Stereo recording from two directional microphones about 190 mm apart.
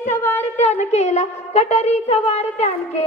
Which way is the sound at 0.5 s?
35° left (ahead or behind).